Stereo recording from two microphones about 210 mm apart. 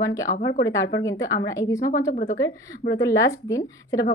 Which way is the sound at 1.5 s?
15° left (ahead or behind).